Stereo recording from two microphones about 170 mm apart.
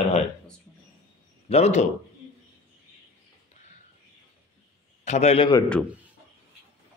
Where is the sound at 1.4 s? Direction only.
40° left (ahead or behind).